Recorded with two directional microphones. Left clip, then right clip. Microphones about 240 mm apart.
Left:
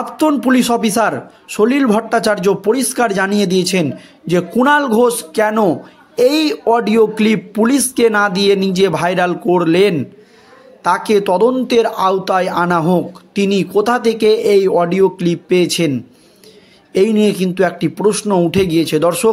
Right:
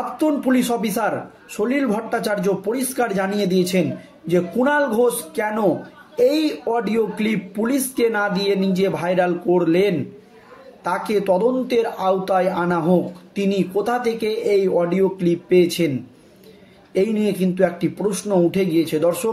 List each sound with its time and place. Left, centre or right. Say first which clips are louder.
0.2 s speech: left 6 dB; left
16.9 s speech: left 7 dB; left